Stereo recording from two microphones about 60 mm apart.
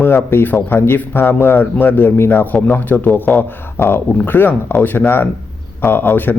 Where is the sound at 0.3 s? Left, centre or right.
Left.